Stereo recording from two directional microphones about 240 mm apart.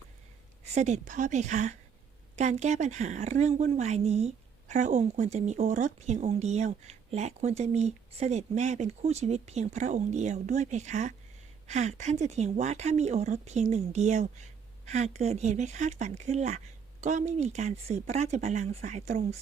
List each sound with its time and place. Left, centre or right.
0.6 s speech: right